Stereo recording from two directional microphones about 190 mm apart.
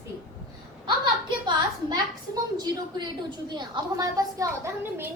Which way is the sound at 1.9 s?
20° right (ahead or behind).